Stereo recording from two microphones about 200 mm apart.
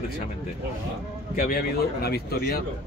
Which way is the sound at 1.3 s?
45° left (ahead or behind).